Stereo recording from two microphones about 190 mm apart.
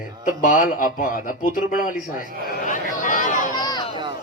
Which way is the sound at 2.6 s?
40° left (ahead or behind).